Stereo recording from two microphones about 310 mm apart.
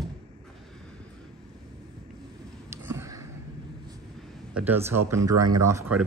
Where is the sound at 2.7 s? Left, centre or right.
Centre.